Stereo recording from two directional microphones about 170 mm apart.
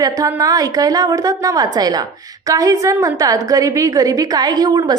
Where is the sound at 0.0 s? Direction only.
20° right (ahead or behind).